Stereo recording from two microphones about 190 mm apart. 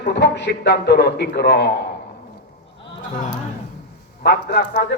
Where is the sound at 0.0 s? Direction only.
60° left (ahead or behind).